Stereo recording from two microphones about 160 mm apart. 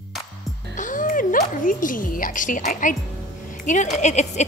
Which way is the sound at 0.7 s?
55° left (ahead or behind).